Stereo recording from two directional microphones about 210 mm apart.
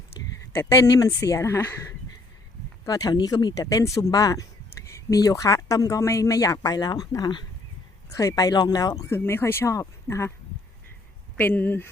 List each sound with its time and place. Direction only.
0.5 s speech: 10° left (ahead or behind)
11.3 s speech: 10° left (ahead or behind)